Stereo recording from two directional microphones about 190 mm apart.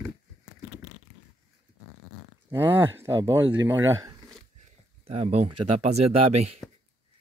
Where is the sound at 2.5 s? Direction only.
10° right (ahead or behind).